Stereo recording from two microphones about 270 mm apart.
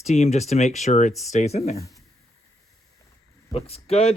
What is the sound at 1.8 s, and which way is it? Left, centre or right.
Speech, centre.